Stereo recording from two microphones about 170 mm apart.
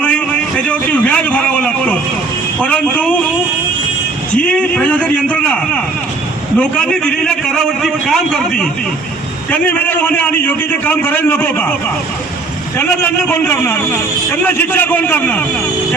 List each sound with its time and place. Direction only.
0.0 s a sound: 10° left (ahead or behind)
2.6 s a man's voice: 10° left (ahead or behind)
4.4 s a man's voice: 5° left (ahead or behind)
12.7 s a man's voice: 15° left (ahead or behind)